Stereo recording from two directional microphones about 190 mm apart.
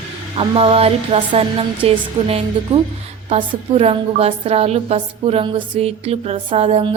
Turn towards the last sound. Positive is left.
turn(degrees=-30)  # may be behind; listen again after turning